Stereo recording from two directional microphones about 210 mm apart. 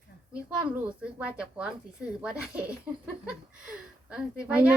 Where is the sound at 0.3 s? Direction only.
5° right (ahead or behind).